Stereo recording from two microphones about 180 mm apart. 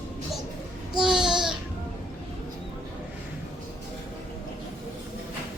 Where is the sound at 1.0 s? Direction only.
5° right (ahead or behind).